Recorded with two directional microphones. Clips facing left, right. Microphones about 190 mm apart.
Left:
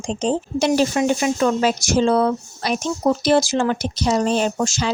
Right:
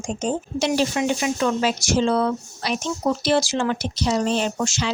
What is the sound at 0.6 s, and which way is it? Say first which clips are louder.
Speech: left 3 dB; 45° left (ahead or behind).